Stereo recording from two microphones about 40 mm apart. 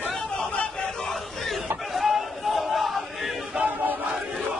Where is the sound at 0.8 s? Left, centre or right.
Centre.